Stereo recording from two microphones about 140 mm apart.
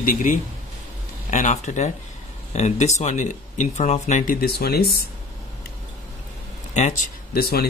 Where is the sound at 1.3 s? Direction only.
60° left (ahead or behind); by 4.8 s 90° left.